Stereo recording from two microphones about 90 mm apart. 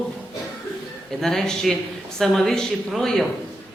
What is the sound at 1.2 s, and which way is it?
A man's voice, 5° left (ahead or behind).